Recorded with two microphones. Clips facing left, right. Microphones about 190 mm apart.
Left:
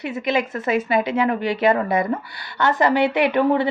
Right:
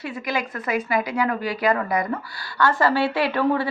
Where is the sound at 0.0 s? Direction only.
20° left (ahead or behind).